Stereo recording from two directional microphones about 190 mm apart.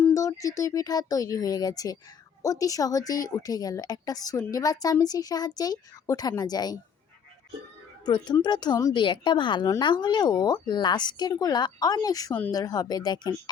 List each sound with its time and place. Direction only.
0.0 s speech: 15° left (ahead or behind)
8.0 s speech: 25° left (ahead or behind)